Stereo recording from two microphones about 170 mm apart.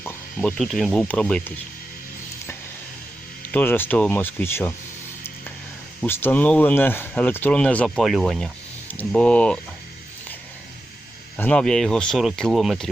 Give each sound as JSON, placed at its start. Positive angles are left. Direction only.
{"t": 0.0, "sound": "speech", "side_deg": 10}
{"t": 3.5, "sound": "speech", "side_deg": 10}
{"t": 6.0, "sound": "speech", "side_deg": 10}
{"t": 11.3, "sound": "speech", "side_deg": 10}